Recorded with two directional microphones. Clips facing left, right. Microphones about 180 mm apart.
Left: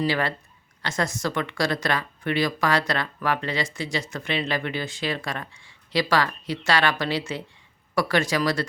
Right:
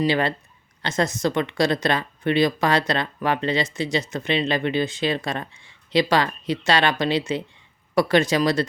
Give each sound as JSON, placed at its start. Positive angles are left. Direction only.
{"t": 0.0, "sound": "speech", "side_deg": -20}